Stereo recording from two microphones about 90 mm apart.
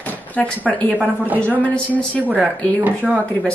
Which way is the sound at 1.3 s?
15° left (ahead or behind).